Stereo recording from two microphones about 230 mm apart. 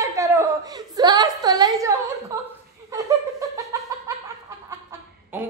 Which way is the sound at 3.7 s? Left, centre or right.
Centre.